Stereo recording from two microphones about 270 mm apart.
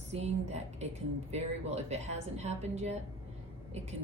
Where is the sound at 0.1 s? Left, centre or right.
Right.